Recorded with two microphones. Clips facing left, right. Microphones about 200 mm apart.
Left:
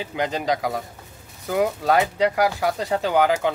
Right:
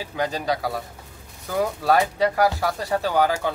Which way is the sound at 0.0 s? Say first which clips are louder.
Left 1 dB; 20° left (ahead or behind).